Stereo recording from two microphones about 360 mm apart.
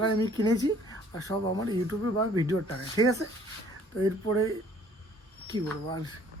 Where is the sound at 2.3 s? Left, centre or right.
Centre.